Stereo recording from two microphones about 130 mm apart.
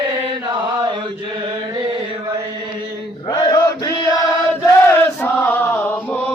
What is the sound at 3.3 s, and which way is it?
Chant, 35° left (ahead or behind).